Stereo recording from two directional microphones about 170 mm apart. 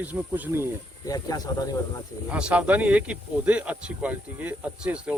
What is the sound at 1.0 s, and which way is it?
Speech, 20° left (ahead or behind).